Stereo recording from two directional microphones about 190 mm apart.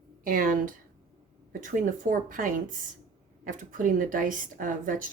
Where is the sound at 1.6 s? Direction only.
45° right (ahead or behind).